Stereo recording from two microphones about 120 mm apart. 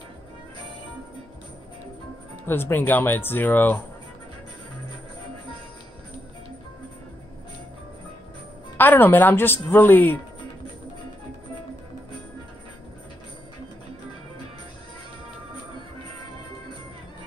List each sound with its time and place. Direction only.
2.4 s a woman's voice: 20° left (ahead or behind)
8.7 s a woman's voice: 15° left (ahead or behind)